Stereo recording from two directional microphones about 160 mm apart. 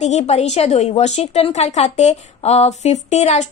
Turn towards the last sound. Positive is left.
turn(degrees=45)  # may be behind; listen again after turning